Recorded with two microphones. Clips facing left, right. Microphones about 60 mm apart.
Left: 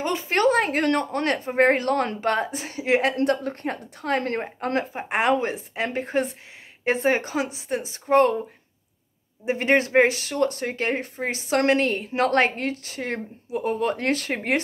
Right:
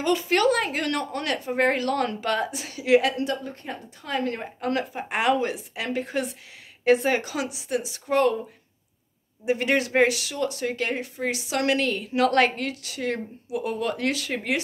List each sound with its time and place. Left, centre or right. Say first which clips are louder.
0.0 s speech: even; left
9.4 s speech: left 2 dB; left